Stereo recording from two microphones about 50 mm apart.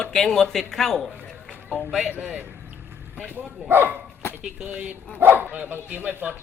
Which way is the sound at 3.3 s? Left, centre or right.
Right.